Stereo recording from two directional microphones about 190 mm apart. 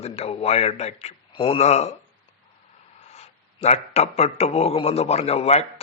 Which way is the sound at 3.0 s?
35° left (ahead or behind).